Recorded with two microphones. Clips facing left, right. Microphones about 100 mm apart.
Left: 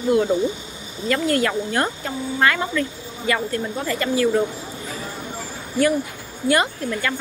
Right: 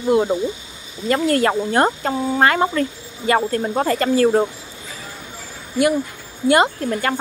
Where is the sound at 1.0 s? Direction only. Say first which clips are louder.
Right 3 dB; 30° right (ahead or behind).